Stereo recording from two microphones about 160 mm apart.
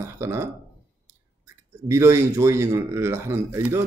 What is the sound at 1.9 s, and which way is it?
Speech, 20° right (ahead or behind).